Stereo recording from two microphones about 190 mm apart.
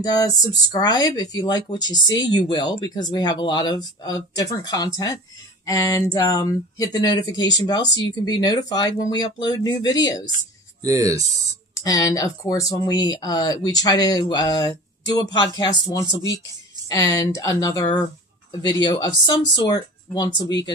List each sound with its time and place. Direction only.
0.0 s speech: 20° left (ahead or behind)
10.8 s speech: 15° right (ahead or behind)
11.8 s speech: 20° left (ahead or behind)